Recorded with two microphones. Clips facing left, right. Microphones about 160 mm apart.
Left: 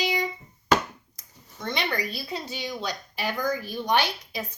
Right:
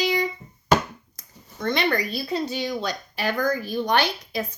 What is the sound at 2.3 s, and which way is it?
Speech, 10° left (ahead or behind).